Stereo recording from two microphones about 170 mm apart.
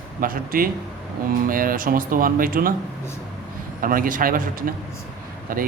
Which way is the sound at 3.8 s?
55° right (ahead or behind).